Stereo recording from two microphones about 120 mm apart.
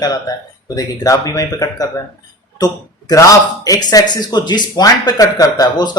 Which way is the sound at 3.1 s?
30° left (ahead or behind).